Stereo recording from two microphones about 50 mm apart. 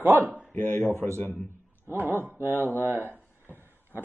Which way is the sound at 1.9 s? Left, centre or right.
Right.